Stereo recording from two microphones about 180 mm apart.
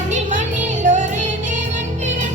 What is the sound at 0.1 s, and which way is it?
Music, 45° right (ahead or behind).